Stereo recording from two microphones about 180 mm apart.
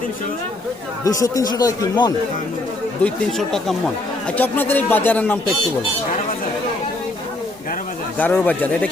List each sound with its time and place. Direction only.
1.0 s speech: 20° left (ahead or behind)
3.0 s speech: 5° left (ahead or behind)
8.2 s speech: 10° left (ahead or behind)